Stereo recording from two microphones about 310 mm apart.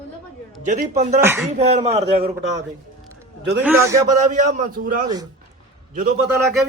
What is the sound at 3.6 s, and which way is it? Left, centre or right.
Speech, centre.